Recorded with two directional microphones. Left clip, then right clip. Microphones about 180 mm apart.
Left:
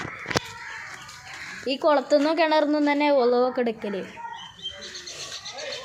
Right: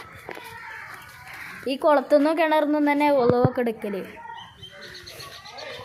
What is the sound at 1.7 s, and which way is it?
A woman's voice, 10° right (ahead or behind).